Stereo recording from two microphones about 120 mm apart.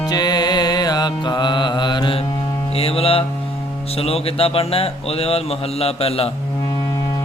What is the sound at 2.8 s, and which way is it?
Music, 55° left (ahead or behind).